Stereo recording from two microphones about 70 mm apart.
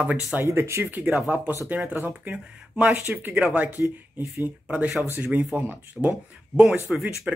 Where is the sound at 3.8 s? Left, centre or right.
Right.